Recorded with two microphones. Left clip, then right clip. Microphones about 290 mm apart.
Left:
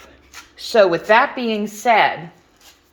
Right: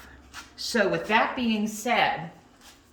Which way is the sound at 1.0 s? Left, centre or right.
Left.